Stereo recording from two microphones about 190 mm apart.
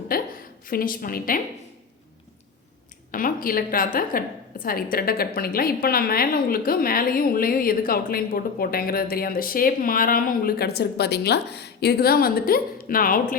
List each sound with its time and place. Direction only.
0.1 s a sound: 50° left (ahead or behind)
0.7 s a woman's voice: 50° left (ahead or behind)
3.1 s a woman's voice: 45° left (ahead or behind)